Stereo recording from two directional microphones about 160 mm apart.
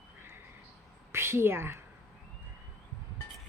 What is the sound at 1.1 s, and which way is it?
Speech, 15° right (ahead or behind).